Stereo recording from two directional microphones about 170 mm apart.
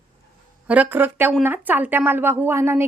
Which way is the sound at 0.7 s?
10° right (ahead or behind).